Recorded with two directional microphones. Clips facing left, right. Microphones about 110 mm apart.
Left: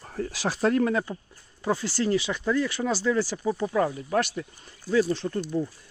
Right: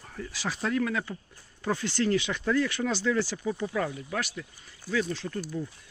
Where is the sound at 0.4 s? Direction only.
40° left (ahead or behind).